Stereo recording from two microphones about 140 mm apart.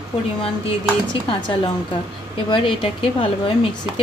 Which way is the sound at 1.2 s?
35° left (ahead or behind).